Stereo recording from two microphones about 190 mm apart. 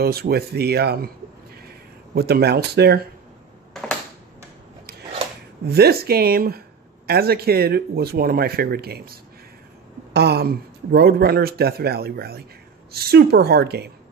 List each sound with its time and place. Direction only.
0.0 s speech: 55° right (ahead or behind)
2.1 s speech: 55° right (ahead or behind)
5.7 s speech: 55° right (ahead or behind)